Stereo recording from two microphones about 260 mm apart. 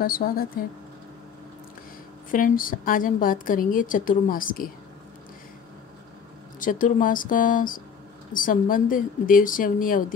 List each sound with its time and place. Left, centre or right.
0.0 s a woman's voice: left
2.3 s a woman's voice: left
6.6 s a woman's voice: left